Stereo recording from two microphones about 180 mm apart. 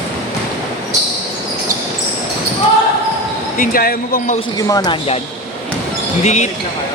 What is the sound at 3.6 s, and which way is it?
Speech, 55° left (ahead or behind).